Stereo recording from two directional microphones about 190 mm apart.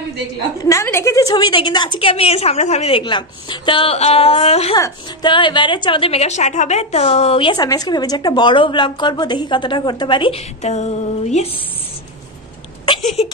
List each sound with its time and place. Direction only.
0.7 s a woman's voice: 15° left (ahead or behind); by 4.7 s 30° left (ahead or behind)
4.7 s a woman's voice: 20° left (ahead or behind); by 11.4 s 35° left (ahead or behind)